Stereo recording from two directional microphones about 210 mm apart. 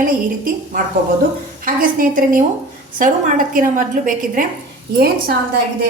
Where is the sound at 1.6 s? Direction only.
40° right (ahead or behind).